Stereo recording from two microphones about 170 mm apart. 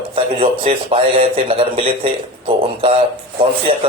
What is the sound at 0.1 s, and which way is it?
Speech, 30° right (ahead or behind).